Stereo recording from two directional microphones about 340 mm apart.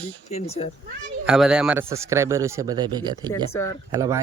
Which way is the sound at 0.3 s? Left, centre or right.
Centre.